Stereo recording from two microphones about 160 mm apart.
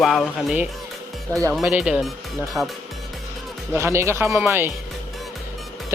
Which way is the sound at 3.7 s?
15° right (ahead or behind).